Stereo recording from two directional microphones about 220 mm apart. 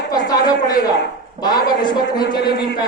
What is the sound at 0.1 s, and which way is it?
A man's voice, 20° left (ahead or behind).